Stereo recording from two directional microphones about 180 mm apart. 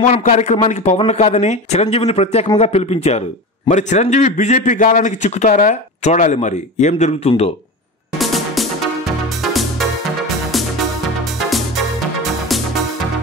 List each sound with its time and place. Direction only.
0.2 s speech: 45° left (ahead or behind)
8.2 s music: centre (ahead or behind)